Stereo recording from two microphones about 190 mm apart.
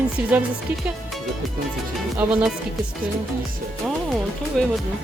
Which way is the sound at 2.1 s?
5° right (ahead or behind).